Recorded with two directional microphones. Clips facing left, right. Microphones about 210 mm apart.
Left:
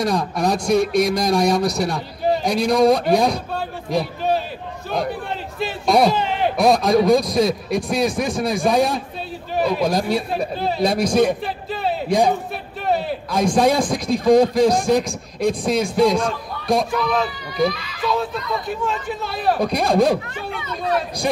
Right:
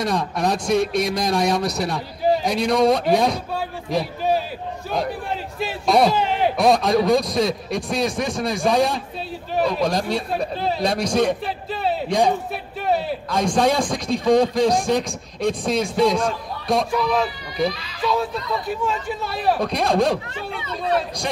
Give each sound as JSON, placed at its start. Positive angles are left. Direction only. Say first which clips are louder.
{"t": 0.0, "sound": "speech", "louder": "left 2 dB", "side_deg": 0}
{"t": 5.6, "sound": "speech", "louder": "left 1 dB", "side_deg": -5}
{"t": 17.6, "sound": "speech", "louder": "left 2 dB", "side_deg": -35}
{"t": 18.7, "sound": "speech", "louder": "right 1 dB", "side_deg": -5}
{"t": 20.5, "sound": "speech", "louder": "even", "side_deg": -30}